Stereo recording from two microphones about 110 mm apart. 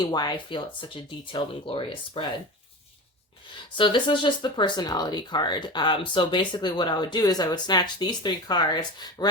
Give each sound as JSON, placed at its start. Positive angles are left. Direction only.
{"t": 0.0, "sound": "speech", "side_deg": 40}
{"t": 3.5, "sound": "speech", "side_deg": 45}